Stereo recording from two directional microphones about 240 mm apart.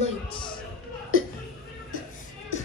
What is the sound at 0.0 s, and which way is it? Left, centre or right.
Music, left.